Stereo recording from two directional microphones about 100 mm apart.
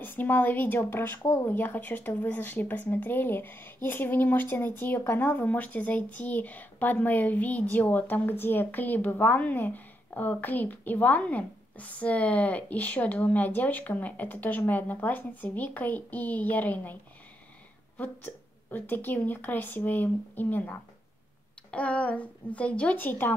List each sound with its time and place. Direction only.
0.0 s a woman's voice: 20° left (ahead or behind)
17.9 s a woman's voice: 15° left (ahead or behind)